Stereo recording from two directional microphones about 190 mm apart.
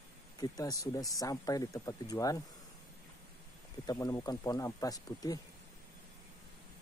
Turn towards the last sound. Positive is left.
turn(degrees=20)  # may be behind; listen again after turning